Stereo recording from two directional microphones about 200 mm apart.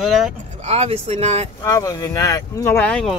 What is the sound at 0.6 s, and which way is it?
Speech, 30° right (ahead or behind).